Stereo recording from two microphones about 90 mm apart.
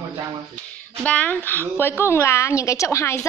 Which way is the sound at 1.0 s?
15° left (ahead or behind).